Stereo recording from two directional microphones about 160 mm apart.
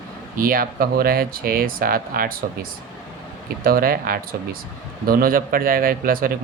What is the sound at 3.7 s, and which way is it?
Speech, 65° right (ahead or behind).